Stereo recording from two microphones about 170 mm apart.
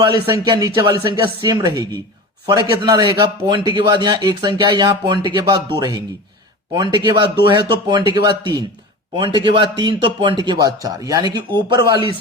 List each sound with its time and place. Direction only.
0.0 s a man's voice: 25° right (ahead or behind)